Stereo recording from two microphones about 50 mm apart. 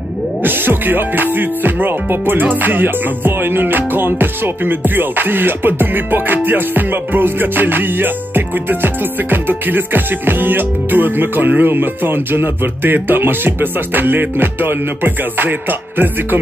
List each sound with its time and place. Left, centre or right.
0.4 s music: right